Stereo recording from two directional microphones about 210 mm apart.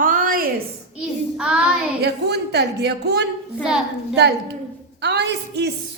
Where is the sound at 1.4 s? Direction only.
5° right (ahead or behind).